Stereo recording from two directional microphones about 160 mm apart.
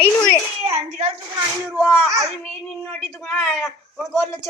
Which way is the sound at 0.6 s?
40° right (ahead or behind).